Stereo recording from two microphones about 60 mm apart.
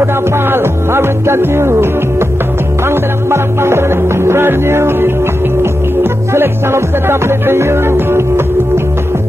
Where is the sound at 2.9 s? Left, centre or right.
Right.